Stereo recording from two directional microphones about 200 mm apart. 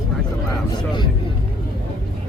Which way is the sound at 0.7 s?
20° left (ahead or behind).